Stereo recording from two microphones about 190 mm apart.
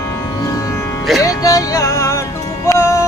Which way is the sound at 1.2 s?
20° left (ahead or behind).